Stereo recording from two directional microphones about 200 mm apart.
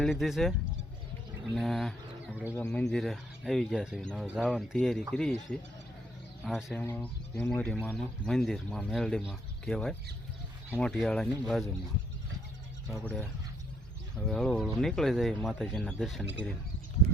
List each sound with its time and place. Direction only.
0.0 s speech: centre (ahead or behind)
1.5 s speech: centre (ahead or behind)
2.6 s speech: 10° left (ahead or behind)
12.9 s speech: 5° left (ahead or behind)
14.3 s speech: 5° left (ahead or behind)